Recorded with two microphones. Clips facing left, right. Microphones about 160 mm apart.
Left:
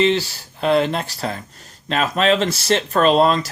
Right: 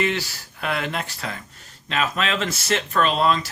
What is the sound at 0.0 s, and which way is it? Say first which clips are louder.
Speech: left 7 dB; 30° left (ahead or behind).